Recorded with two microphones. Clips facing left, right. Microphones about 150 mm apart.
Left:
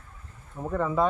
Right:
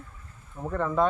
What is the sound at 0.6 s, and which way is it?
Speech, 5° left (ahead or behind).